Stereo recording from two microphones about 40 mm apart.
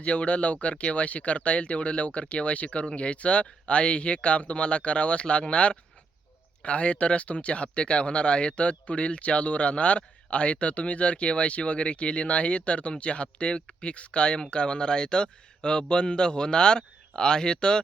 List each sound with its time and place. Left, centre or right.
0.0 s speech: left